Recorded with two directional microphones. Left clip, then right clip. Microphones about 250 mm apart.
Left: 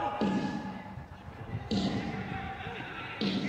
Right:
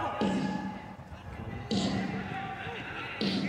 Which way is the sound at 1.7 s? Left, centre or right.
Right.